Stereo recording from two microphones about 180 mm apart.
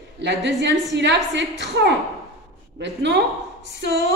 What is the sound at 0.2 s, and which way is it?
A woman's voice, 75° right (ahead or behind).